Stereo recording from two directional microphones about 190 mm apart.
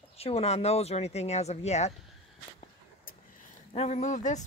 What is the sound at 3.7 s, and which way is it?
Speech, 35° left (ahead or behind).